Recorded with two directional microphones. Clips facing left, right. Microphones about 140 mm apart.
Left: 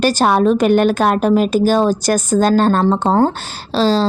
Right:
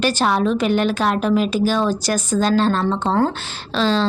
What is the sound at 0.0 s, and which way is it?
A woman's voice, 40° left (ahead or behind).